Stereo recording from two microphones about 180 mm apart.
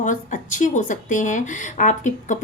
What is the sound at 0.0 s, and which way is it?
Speech, 45° left (ahead or behind).